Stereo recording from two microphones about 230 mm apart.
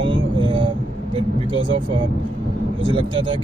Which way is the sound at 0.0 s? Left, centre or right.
Right.